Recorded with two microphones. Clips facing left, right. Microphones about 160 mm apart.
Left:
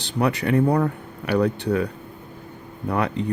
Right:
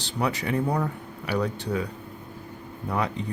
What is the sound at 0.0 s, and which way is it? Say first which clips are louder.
Speech: left 5 dB; 60° left (ahead or behind).